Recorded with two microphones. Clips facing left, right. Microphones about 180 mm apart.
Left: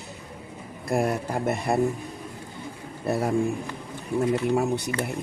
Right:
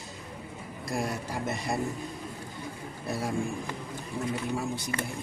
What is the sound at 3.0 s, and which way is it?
Speech, 60° left (ahead or behind).